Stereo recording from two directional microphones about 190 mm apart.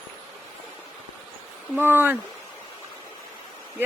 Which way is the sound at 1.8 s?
10° right (ahead or behind).